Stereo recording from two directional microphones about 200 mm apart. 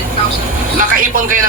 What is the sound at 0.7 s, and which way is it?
Speech, 40° right (ahead or behind).